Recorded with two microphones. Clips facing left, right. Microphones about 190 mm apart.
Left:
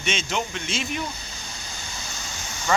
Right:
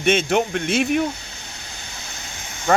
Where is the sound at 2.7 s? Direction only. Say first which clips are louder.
Right 5 dB; 55° right (ahead or behind).